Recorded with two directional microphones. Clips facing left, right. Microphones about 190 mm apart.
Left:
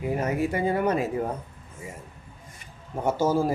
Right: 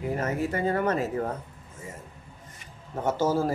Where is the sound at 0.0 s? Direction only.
15° left (ahead or behind).